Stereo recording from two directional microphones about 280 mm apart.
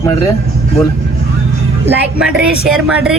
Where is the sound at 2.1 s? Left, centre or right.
Centre.